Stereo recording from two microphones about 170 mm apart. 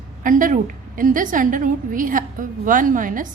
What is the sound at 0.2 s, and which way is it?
A woman's voice, 50° right (ahead or behind).